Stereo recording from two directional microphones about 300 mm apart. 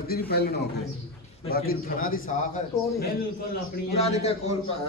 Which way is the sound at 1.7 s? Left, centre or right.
Left.